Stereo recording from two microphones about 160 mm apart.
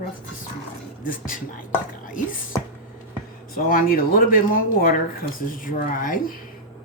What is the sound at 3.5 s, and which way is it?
Speech, 65° left (ahead or behind).